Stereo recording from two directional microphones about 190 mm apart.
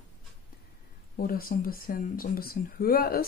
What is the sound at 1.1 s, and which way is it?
Speech, 50° left (ahead or behind).